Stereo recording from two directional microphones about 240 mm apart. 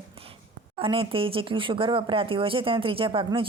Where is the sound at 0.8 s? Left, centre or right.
Right.